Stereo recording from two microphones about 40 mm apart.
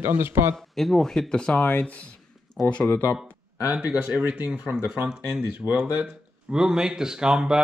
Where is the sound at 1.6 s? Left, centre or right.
Left.